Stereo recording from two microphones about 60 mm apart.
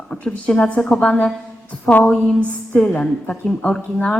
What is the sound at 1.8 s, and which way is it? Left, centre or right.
A woman's voice, left.